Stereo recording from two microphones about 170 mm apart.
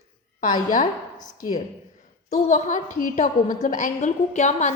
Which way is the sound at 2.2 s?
45° left (ahead or behind).